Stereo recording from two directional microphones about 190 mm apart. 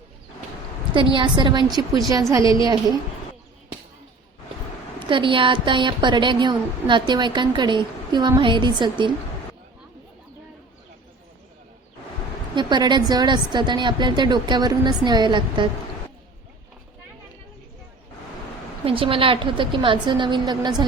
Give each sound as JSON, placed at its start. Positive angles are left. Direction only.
{"t": 0.9, "sound": "a woman's voice", "side_deg": -25}
{"t": 2.4, "sound": "a woman's voice", "side_deg": 25}
{"t": 4.9, "sound": "a woman's voice", "side_deg": -25}
{"t": 12.5, "sound": "a woman's voice", "side_deg": -25}
{"t": 18.9, "sound": "a woman's voice", "side_deg": -30}